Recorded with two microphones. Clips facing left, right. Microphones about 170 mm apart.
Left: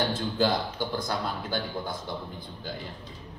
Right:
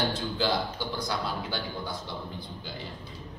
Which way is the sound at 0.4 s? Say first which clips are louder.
Left 3 dB; 50° left (ahead or behind).